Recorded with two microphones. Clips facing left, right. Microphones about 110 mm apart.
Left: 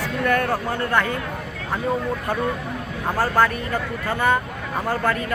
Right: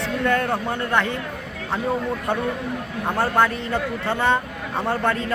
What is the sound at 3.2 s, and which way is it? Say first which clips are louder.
A man's voice: even; 25° right (ahead or behind).